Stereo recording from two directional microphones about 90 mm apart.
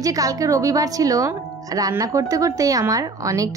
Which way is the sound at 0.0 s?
40° right (ahead or behind).